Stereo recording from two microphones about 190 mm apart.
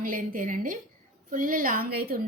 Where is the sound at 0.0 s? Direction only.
45° right (ahead or behind).